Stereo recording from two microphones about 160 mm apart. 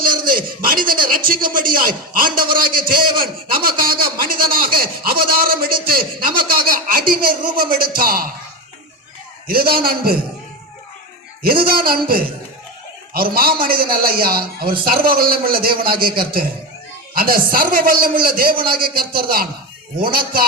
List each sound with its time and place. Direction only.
0.0 s a man's voice: 65° right (ahead or behind)
2.6 s a sound: 65° right (ahead or behind)
9.5 s a man's voice: 70° right (ahead or behind)
11.4 s a man's voice: 65° right (ahead or behind)